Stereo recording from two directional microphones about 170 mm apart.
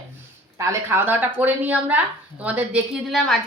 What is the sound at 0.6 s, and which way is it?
A woman's voice, 15° right (ahead or behind).